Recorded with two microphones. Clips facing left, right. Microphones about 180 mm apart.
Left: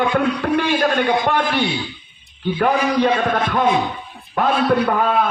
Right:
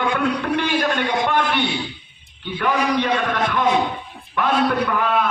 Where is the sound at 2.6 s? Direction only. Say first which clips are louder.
Left 3 dB; 35° left (ahead or behind).